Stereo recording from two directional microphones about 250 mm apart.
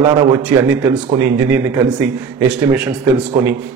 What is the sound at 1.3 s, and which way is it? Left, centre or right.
A man's voice, centre.